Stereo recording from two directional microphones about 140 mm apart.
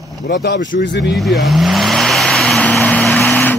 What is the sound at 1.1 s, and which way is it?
Vehicle, centre (ahead or behind).